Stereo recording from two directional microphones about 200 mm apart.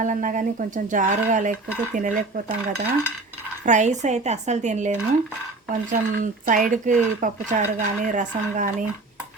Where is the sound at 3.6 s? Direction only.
35° right (ahead or behind).